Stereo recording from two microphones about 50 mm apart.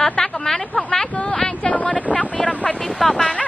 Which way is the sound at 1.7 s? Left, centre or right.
Left.